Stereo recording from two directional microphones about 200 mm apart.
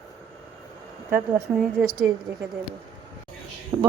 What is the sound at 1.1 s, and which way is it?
Speech, 10° right (ahead or behind).